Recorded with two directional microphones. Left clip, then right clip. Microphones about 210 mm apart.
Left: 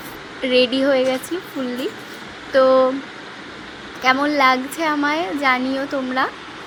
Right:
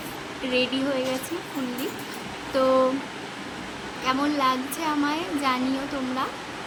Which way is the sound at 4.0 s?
25° left (ahead or behind).